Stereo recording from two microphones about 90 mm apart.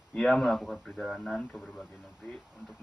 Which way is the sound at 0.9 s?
10° left (ahead or behind).